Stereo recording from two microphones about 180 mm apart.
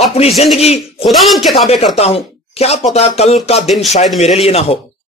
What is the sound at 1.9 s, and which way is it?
Speech, 35° left (ahead or behind).